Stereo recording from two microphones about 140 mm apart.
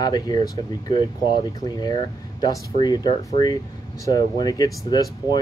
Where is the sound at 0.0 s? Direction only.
30° left (ahead or behind).